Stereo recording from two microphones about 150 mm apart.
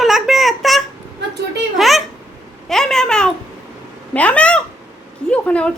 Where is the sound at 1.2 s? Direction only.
90° right.